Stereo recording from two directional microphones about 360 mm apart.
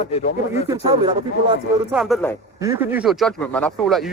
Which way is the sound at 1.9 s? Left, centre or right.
Centre.